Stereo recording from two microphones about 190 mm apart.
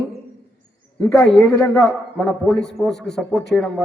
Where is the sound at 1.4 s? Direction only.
15° left (ahead or behind).